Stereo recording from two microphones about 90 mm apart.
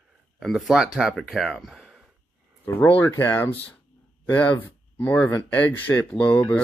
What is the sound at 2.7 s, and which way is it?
Speech, 20° left (ahead or behind).